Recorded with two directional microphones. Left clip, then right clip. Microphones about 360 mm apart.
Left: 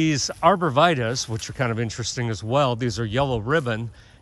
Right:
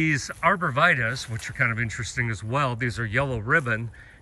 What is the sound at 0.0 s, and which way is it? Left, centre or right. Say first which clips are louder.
Speech: left 3 dB; centre.